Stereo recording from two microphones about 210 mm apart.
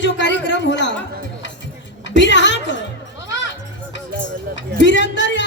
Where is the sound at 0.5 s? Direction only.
60° left (ahead or behind).